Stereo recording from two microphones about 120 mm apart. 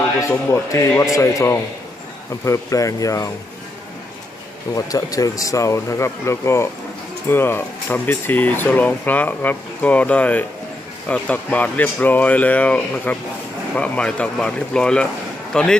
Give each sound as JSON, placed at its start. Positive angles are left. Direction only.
{"t": 0.2, "sound": "speech", "side_deg": 25}
{"t": 4.7, "sound": "speech", "side_deg": 30}